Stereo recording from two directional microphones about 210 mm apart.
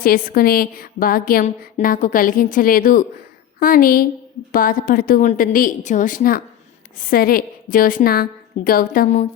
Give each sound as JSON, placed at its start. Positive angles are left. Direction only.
{"t": 0.0, "sound": "a woman's voice", "side_deg": 45}